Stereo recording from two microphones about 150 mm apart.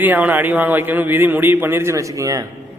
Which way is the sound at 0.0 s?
10° right (ahead or behind).